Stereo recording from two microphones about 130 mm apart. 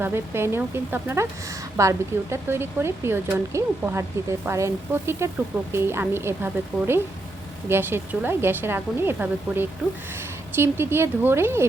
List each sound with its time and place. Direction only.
0.0 s speech: 20° right (ahead or behind)